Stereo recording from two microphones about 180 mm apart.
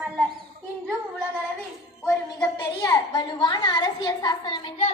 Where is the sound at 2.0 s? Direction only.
10° left (ahead or behind).